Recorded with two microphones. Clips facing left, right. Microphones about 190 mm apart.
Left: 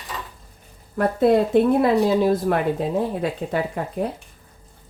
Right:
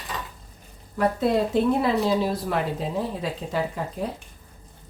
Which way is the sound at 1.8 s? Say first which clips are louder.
Left 5 dB; 55° left (ahead or behind).